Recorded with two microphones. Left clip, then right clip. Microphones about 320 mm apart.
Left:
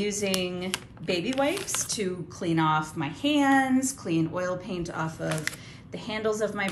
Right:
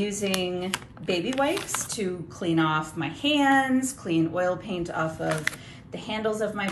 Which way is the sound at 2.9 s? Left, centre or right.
Centre.